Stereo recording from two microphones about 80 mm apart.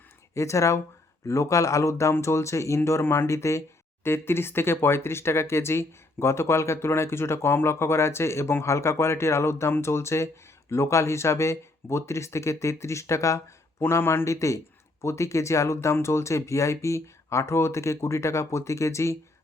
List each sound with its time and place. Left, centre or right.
0.3 s speech: left
13.8 s speech: left